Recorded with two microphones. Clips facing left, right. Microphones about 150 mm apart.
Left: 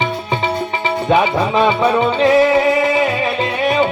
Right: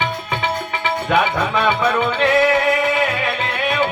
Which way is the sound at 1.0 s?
30° left (ahead or behind).